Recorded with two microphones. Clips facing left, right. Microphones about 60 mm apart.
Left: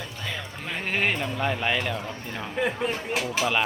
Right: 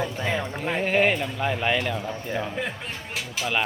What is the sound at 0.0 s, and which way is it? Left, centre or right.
Music, right.